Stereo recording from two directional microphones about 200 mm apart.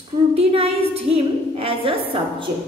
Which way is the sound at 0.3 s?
30° right (ahead or behind).